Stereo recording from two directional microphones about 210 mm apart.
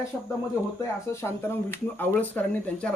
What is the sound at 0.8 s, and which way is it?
Speech, 15° left (ahead or behind).